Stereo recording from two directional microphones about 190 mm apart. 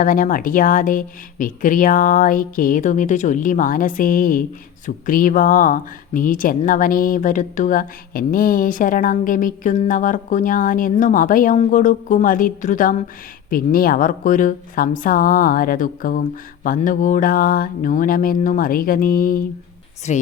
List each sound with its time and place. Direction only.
0.0 s a woman's voice: 45° left (ahead or behind)
20.1 s a woman's voice: 40° left (ahead or behind)